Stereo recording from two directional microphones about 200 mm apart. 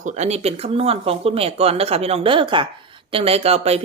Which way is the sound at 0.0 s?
35° right (ahead or behind).